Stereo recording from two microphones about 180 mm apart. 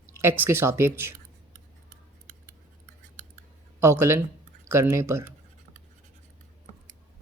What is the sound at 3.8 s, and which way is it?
Speech, 15° right (ahead or behind).